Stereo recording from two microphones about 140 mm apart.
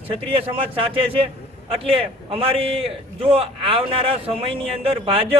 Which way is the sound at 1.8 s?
45° right (ahead or behind).